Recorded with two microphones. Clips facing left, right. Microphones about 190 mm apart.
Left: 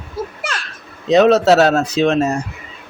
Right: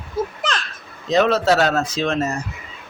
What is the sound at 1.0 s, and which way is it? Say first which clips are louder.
Speech: left 6 dB; 70° left (ahead or behind).